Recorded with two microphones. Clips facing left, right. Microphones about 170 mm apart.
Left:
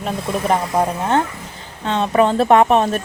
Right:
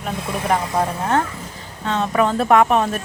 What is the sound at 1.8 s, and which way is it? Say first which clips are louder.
Speech: left 3 dB; 30° left (ahead or behind).